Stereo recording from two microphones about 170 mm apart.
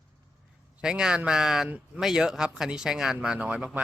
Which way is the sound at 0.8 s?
5° right (ahead or behind).